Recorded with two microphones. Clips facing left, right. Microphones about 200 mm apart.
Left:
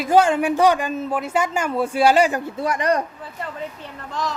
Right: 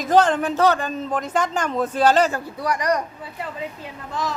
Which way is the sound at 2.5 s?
25° left (ahead or behind).